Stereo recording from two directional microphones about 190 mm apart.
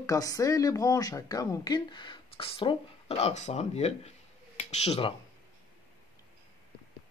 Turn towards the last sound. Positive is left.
turn(degrees=30)  # may be behind; listen again after turning